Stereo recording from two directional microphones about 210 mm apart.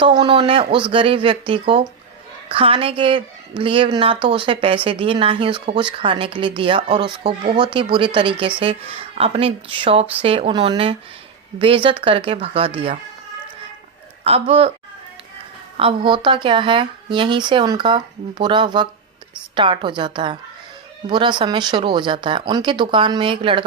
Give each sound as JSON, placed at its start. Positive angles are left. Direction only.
{"t": 0.0, "sound": "speech", "side_deg": -20}
{"t": 14.3, "sound": "speech", "side_deg": -30}
{"t": 15.8, "sound": "speech", "side_deg": -25}